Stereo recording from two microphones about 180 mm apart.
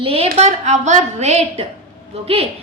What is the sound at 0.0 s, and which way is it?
A woman's voice, 35° right (ahead or behind).